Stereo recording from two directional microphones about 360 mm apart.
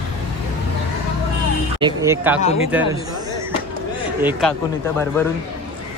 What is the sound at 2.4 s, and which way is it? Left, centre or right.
Speech, centre.